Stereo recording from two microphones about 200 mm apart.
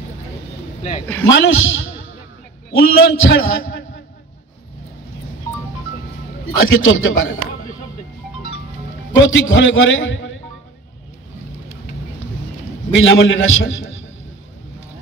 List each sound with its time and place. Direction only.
1.3 s a man's voice: 70° left (ahead or behind)
6.5 s a man's voice: 80° left
9.1 s a man's voice: 75° left (ahead or behind)
12.9 s a man's voice: 70° left (ahead or behind)